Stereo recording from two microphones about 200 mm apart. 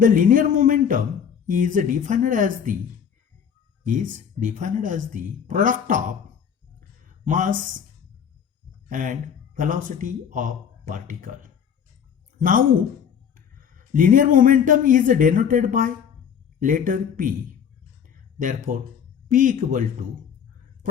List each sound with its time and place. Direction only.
0.0 s a sound: 40° right (ahead or behind)
1.5 s speech: 40° right (ahead or behind)
3.8 s speech: 40° right (ahead or behind)
7.3 s speech: 40° right (ahead or behind)
8.9 s speech: 40° right (ahead or behind)
12.4 s a man's voice: 45° right (ahead or behind)
16.6 s a sound: 40° right (ahead or behind)
18.3 s speech: 40° right (ahead or behind)